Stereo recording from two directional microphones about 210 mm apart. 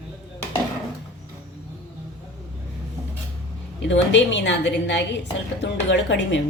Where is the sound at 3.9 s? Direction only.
60° left (ahead or behind).